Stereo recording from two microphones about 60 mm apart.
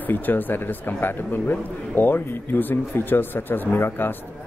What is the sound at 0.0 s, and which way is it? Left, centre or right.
Speech, left.